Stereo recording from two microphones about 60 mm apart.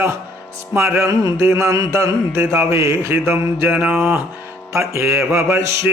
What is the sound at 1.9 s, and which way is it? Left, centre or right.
Mantra, right.